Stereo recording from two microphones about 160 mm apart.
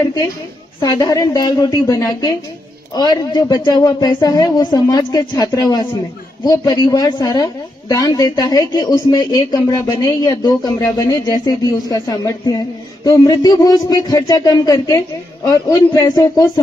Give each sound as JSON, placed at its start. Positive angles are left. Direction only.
{"t": 0.7, "sound": "speech", "side_deg": 25}